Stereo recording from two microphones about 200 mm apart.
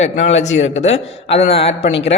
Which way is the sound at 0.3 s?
35° left (ahead or behind).